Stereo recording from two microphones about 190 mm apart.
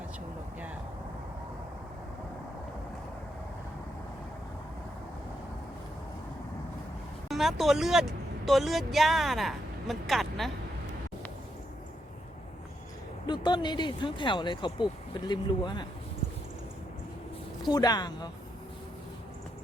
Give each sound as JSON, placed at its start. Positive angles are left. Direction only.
{"t": 7.3, "sound": "speech", "side_deg": 0}
{"t": 13.2, "sound": "speech", "side_deg": 25}
{"t": 17.7, "sound": "speech", "side_deg": 20}